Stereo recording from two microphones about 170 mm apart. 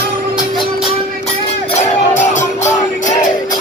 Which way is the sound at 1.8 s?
45° left (ahead or behind).